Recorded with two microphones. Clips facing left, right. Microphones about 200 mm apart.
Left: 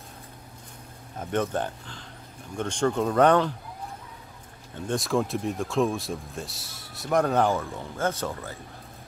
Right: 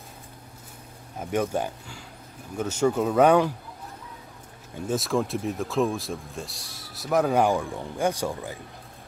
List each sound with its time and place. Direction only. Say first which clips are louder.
1.2 s speech: right 1 dB; 10° right (ahead or behind)
4.8 s speech: even; centre (ahead or behind)